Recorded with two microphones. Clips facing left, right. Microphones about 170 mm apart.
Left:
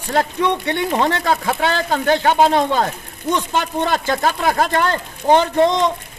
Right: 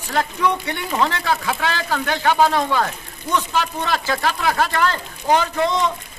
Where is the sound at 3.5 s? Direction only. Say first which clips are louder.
Left 3 dB; 50° left (ahead or behind).